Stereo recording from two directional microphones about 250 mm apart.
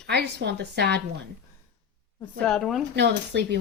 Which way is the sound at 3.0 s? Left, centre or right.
Right.